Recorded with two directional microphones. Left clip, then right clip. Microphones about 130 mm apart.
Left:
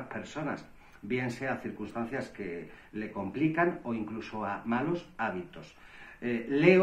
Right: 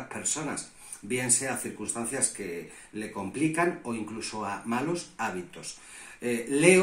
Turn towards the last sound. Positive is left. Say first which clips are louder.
# right 2 dB
turn(degrees=-10)  # may be behind; listen again after turning